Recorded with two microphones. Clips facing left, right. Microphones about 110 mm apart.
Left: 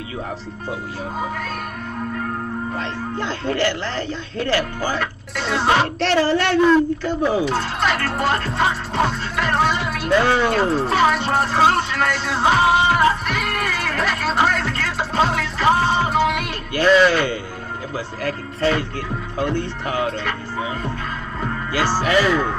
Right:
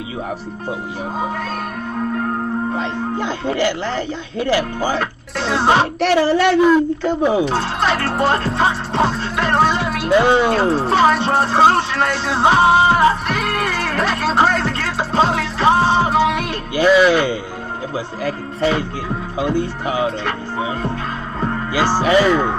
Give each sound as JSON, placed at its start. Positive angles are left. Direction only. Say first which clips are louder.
{"t": 2.7, "sound": "speech", "louder": "right 4 dB", "side_deg": -15}
{"t": 4.9, "sound": "music", "louder": "right 3 dB", "side_deg": -30}
{"t": 5.9, "sound": "speech", "louder": "right 3 dB", "side_deg": -10}
{"t": 7.4, "sound": "speech", "louder": "right 2 dB", "side_deg": -30}
{"t": 8.5, "sound": "music", "louder": "right 3 dB", "side_deg": -30}
{"t": 10.0, "sound": "speech", "louder": "right 3 dB", "side_deg": -15}
{"t": 10.5, "sound": "speech", "louder": "right 3 dB", "side_deg": -30}
{"t": 12.4, "sound": "music", "louder": "right 3 dB", "side_deg": -30}
{"t": 16.7, "sound": "speech", "louder": "right 2 dB", "side_deg": -10}
{"t": 21.7, "sound": "speech", "louder": "right 4 dB", "side_deg": -15}